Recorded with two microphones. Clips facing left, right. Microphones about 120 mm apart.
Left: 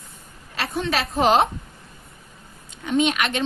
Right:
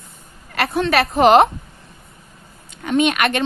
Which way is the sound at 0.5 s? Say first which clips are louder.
Right 7 dB; 65° right (ahead or behind).